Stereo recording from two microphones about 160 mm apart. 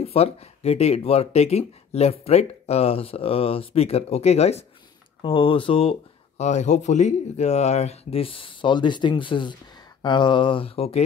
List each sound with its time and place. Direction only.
0.0 s speech: 40° left (ahead or behind)